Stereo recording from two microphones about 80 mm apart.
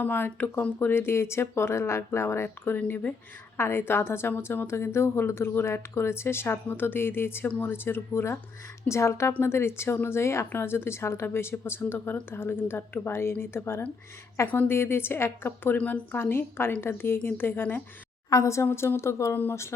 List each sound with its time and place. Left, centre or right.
0.0 s a woman's voice: left
18.3 s a woman's voice: left